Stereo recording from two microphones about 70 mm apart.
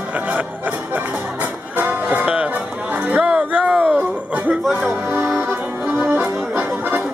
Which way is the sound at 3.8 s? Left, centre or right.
Right.